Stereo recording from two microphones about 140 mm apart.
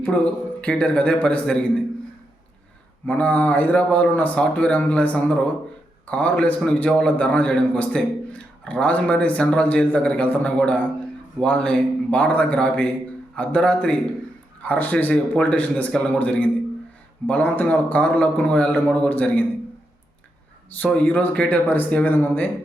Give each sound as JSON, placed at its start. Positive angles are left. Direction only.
{"t": 0.6, "sound": "a man's voice", "side_deg": 10}
{"t": 3.1, "sound": "a man's voice", "side_deg": 10}
{"t": 20.7, "sound": "a man's voice", "side_deg": 10}